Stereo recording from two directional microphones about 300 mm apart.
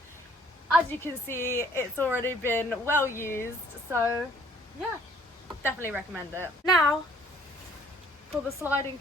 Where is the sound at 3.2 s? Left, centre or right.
Centre.